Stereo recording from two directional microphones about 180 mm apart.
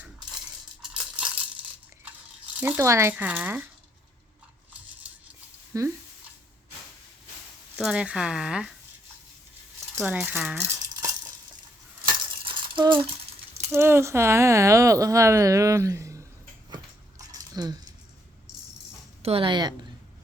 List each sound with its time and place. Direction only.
0.8 s a sound: 5° right (ahead or behind)
2.6 s speech: 10° right (ahead or behind)
5.7 s speech: 20° right (ahead or behind)
7.8 s speech: 5° right (ahead or behind)
10.0 s speech: 10° right (ahead or behind)
12.0 s coin: 25° right (ahead or behind)
13.7 s speech: 15° right (ahead or behind)
16.6 s a sound: 20° right (ahead or behind)
19.2 s speech: 30° right (ahead or behind)